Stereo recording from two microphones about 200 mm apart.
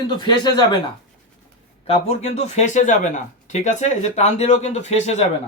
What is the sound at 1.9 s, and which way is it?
Speech, 30° left (ahead or behind).